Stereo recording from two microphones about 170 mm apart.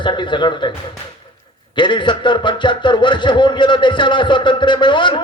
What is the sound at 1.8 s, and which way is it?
Speech, 30° left (ahead or behind).